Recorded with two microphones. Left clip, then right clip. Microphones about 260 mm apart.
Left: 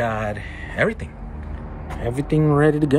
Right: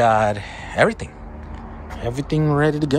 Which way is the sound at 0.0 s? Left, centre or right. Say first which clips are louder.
Right 8 dB; centre.